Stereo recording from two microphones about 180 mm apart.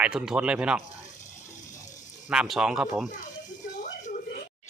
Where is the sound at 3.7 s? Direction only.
45° left (ahead or behind).